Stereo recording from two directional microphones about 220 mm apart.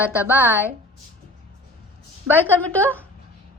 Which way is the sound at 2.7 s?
5° left (ahead or behind).